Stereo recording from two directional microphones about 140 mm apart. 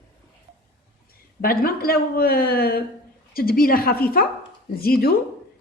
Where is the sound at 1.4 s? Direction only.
90° left.